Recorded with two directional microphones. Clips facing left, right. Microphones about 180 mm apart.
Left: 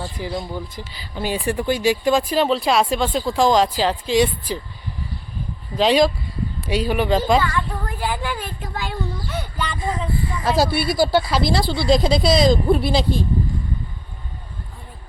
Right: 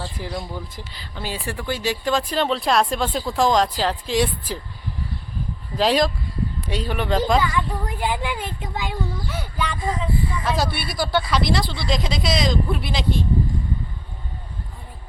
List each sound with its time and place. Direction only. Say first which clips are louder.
0.0 s speech: left 3 dB; centre (ahead or behind)
1.1 s speech: left 7 dB; 15° left (ahead or behind); by 4.6 s centre (ahead or behind)
5.7 s speech: left 3 dB; centre (ahead or behind)
7.4 s a child's voice: even; 15° right (ahead or behind)
9.3 s speech: left 1 dB; 5° right (ahead or behind)
10.8 s speech: left 6 dB; 30° left (ahead or behind)